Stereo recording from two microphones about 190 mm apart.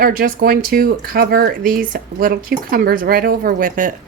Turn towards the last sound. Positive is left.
turn(degrees=-45)  # may be behind; listen again after turning